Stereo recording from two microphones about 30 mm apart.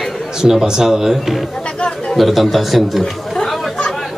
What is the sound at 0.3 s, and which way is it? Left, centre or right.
A man's voice, centre.